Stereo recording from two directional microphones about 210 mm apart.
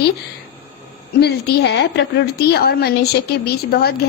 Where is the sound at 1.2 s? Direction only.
50° left (ahead or behind).